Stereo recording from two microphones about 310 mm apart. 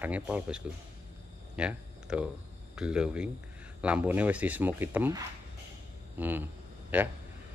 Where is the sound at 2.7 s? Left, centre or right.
Centre.